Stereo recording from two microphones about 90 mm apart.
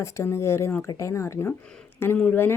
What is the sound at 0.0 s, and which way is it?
A woman's voice, 30° left (ahead or behind).